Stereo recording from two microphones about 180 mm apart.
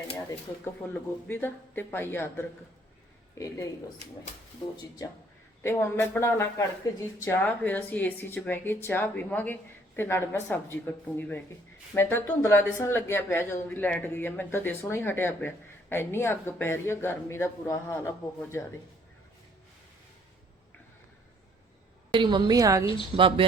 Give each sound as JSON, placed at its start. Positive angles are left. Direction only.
{"t": 0.3, "sound": "a woman's voice", "side_deg": 10}
{"t": 5.6, "sound": "a woman's voice", "side_deg": 15}
{"t": 22.1, "sound": "a woman's voice", "side_deg": -25}
{"t": 23.1, "sound": "a woman's voice", "side_deg": -30}